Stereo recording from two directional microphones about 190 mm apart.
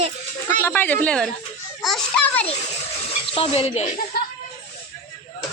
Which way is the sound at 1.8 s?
Centre (ahead or behind).